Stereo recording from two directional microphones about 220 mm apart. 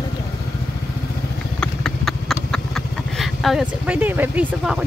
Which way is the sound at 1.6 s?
5° left (ahead or behind).